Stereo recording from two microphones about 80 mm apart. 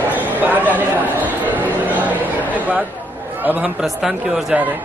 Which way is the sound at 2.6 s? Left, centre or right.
Centre.